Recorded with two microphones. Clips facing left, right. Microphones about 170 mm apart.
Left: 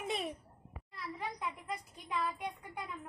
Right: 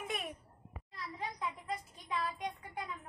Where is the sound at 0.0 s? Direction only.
30° left (ahead or behind).